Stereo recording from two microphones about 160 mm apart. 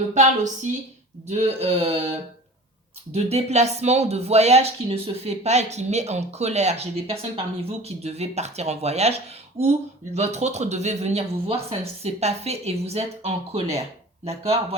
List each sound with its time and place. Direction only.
0.1 s speech: 50° right (ahead or behind)
3.1 s speech: 40° right (ahead or behind)